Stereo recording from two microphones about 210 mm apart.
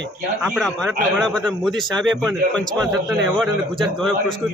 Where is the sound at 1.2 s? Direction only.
5° left (ahead or behind).